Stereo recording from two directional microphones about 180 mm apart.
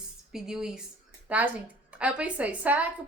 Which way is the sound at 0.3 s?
5° right (ahead or behind).